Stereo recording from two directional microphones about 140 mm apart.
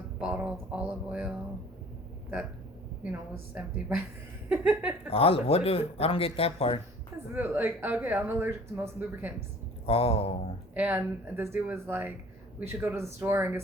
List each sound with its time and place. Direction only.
0.2 s speech: 5° right (ahead or behind)
3.0 s speech: 10° right (ahead or behind)
5.0 s speech: 45° left (ahead or behind)
7.3 s speech: 15° right (ahead or behind)
9.8 s speech: 45° left (ahead or behind)
10.8 s speech: 15° right (ahead or behind)